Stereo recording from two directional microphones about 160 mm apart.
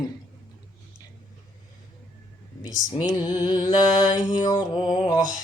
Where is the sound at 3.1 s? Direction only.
25° left (ahead or behind).